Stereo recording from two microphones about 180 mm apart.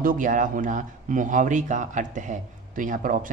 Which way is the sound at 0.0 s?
45° right (ahead or behind).